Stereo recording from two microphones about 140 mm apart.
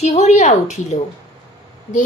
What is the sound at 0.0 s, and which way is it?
A woman's voice, 55° left (ahead or behind).